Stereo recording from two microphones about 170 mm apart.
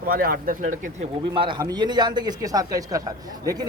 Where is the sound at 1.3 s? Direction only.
25° right (ahead or behind).